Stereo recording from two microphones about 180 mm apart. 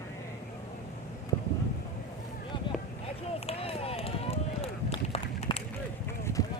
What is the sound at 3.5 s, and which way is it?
Run, 35° left (ahead or behind).